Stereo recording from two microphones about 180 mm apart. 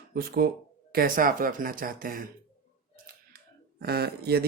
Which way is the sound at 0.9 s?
50° right (ahead or behind).